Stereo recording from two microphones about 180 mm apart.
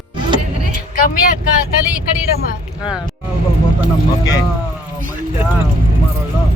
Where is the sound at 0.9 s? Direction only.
50° left (ahead or behind).